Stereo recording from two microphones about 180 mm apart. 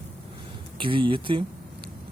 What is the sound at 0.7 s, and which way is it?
Speech, 30° right (ahead or behind).